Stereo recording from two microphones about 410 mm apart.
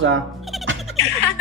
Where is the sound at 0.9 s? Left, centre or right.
Left.